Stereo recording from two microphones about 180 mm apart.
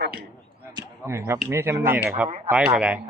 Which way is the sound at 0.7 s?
15° right (ahead or behind).